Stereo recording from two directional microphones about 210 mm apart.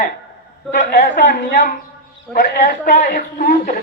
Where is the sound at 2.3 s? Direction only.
45° left (ahead or behind).